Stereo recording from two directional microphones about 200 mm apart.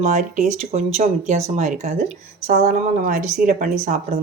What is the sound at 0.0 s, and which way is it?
A woman's voice, 40° right (ahead or behind).